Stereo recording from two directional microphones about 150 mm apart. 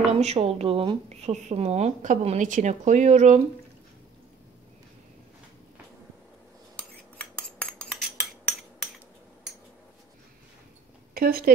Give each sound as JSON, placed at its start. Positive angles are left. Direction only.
{"t": 0.1, "sound": "a woman's voice", "side_deg": -45}
{"t": 11.1, "sound": "speech", "side_deg": -80}